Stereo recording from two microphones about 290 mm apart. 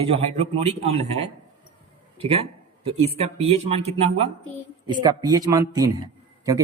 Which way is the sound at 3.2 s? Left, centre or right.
Right.